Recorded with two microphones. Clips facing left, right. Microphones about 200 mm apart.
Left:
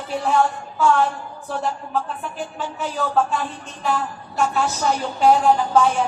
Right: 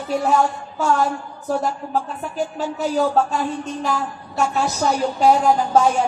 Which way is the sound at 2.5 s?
40° right (ahead or behind).